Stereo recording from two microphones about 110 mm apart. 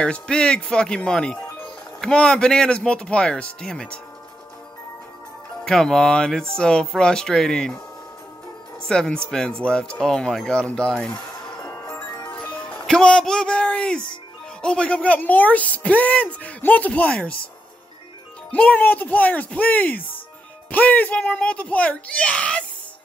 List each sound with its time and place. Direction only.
0.0 s speech: 10° left (ahead or behind)
5.7 s speech: 5° left (ahead or behind)
8.8 s speech: 10° left (ahead or behind)
12.0 s music: 30° left (ahead or behind)
12.3 s speech: 10° left (ahead or behind)
18.5 s speech: 10° left (ahead or behind)